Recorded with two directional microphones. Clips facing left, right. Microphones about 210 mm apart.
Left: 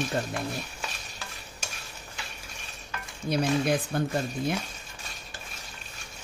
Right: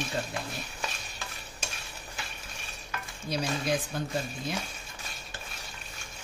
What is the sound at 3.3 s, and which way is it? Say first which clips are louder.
Speech: left 5 dB; 55° left (ahead or behind).